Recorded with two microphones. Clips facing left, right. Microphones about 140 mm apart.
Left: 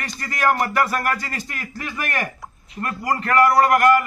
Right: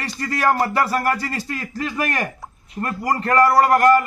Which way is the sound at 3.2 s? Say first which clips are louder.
Right 1 dB; 35° right (ahead or behind).